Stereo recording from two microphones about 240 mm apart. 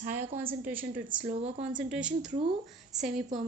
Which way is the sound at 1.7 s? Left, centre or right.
Centre.